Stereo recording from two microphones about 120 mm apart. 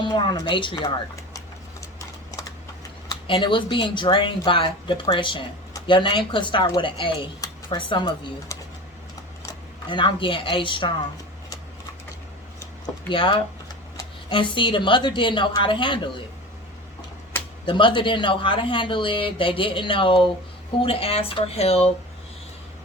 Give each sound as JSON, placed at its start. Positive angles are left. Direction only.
{"t": 0.0, "sound": "speech", "side_deg": 40}
{"t": 1.8, "sound": "clip-clop", "side_deg": 25}
{"t": 3.2, "sound": "speech", "side_deg": 45}
{"t": 8.5, "sound": "typing", "side_deg": 25}
{"t": 9.9, "sound": "speech", "side_deg": 40}
{"t": 13.1, "sound": "speech", "side_deg": 45}
{"t": 17.7, "sound": "speech", "side_deg": 40}